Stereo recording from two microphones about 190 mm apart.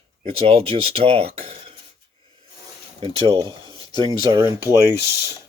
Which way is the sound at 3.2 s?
25° right (ahead or behind).